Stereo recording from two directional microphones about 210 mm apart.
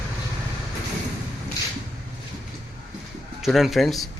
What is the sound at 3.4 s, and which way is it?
Speech, centre (ahead or behind).